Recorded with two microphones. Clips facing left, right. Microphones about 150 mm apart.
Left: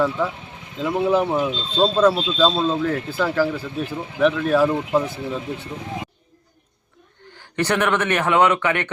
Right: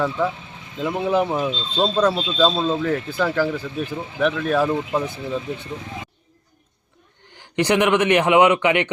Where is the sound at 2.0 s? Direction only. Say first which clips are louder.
Left 1 dB; centre (ahead or behind).